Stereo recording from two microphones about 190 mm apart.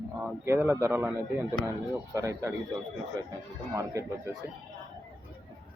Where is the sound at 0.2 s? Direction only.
10° right (ahead or behind).